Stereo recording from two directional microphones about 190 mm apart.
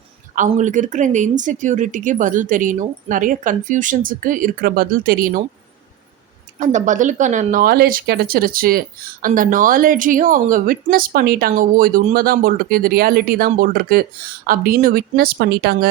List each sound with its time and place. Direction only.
0.3 s a woman's voice: 40° right (ahead or behind)
6.6 s a woman's voice: 40° right (ahead or behind); by 15.9 s 55° right (ahead or behind)